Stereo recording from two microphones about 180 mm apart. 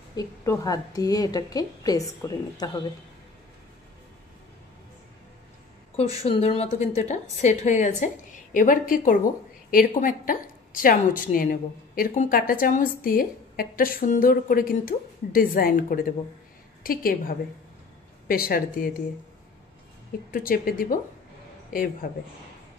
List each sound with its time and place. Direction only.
0.1 s a woman's voice: 20° left (ahead or behind)
6.2 s a woman's voice: 35° left (ahead or behind); by 18.9 s 55° left (ahead or behind)
20.2 s a woman's voice: 50° left (ahead or behind)
22.0 s a woman's voice: 50° left (ahead or behind)